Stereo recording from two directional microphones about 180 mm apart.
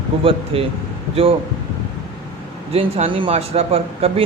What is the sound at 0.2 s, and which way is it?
A man's voice, 30° right (ahead or behind).